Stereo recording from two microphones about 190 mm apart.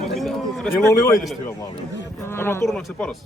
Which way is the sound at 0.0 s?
Centre (ahead or behind).